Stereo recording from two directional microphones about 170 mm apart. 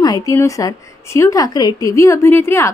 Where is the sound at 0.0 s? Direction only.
20° left (ahead or behind).